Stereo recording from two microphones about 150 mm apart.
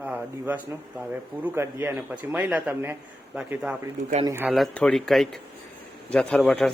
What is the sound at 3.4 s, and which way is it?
Speech, 5° right (ahead or behind).